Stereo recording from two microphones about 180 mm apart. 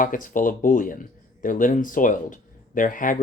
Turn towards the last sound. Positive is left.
turn(degrees=45)  # may be behind; listen again after turning